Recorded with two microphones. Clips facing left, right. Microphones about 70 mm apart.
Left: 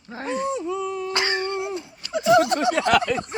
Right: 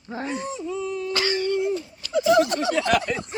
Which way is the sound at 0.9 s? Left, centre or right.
Left.